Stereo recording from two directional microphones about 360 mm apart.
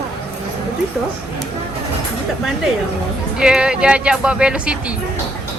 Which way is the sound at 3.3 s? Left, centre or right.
Centre.